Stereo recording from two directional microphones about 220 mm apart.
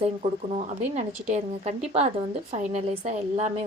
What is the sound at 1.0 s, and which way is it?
A woman's voice, 30° right (ahead or behind).